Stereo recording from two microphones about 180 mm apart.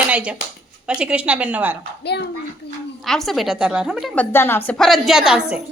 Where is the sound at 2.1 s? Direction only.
65° left (ahead or behind).